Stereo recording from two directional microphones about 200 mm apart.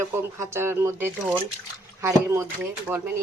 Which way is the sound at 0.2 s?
10° right (ahead or behind).